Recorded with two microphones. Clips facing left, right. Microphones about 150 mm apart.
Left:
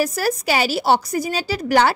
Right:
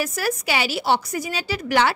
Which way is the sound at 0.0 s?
35° left (ahead or behind).